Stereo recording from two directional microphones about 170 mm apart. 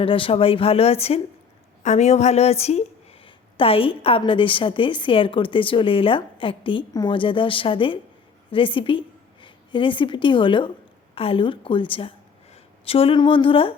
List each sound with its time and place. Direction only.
0.0 s a woman's voice: 30° left (ahead or behind)